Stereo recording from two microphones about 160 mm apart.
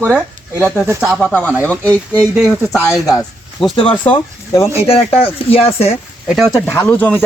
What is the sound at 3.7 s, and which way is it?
Speech, 30° left (ahead or behind).